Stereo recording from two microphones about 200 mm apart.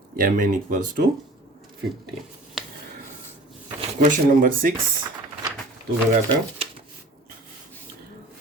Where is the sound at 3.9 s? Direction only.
40° right (ahead or behind).